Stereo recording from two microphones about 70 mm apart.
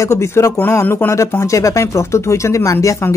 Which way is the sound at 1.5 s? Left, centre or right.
Left.